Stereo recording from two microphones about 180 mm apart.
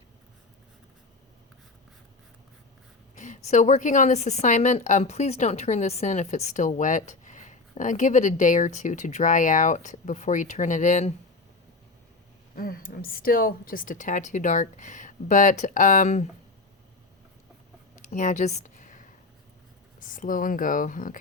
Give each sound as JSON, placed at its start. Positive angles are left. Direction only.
{"t": 3.2, "sound": "a woman's voice", "side_deg": 45}
{"t": 12.5, "sound": "a woman's voice", "side_deg": 55}
{"t": 18.1, "sound": "a sound", "side_deg": 45}
{"t": 20.0, "sound": "a woman's voice", "side_deg": 50}